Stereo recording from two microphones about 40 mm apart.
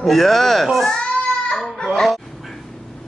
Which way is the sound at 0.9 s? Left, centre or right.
Left.